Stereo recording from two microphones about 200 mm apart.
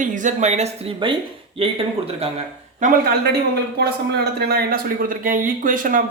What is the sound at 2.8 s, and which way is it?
Speech, 35° right (ahead or behind).